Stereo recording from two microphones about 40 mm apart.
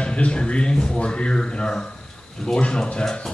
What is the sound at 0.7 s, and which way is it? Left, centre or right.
Speech, centre.